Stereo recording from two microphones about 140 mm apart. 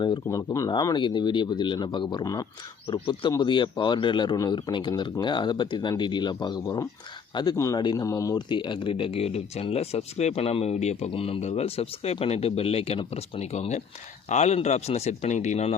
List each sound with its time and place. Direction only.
0.0 s speech: 30° left (ahead or behind); by 15.7 s 55° left (ahead or behind)